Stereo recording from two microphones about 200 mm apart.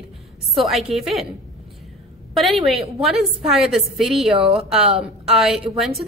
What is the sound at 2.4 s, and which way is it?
A woman's voice, centre (ahead or behind).